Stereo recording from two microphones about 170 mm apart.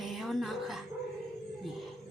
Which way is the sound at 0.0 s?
Centre (ahead or behind).